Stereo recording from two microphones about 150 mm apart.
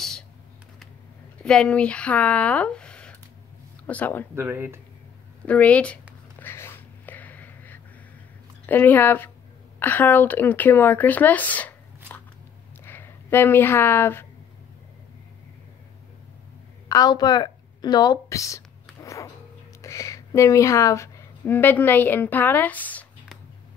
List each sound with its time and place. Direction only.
1.4 s speech: 5° left (ahead or behind)
4.4 s speech: 15° right (ahead or behind)
5.4 s speech: 10° left (ahead or behind)
6.4 s a sound: 15° left (ahead or behind)
8.6 s speech: 10° left (ahead or behind)
12.8 s speech: 15° left (ahead or behind)
16.9 s a sound: 25° left (ahead or behind)
19.8 s speech: 20° left (ahead or behind)